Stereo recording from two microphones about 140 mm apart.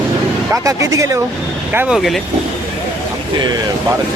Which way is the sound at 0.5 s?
25° right (ahead or behind).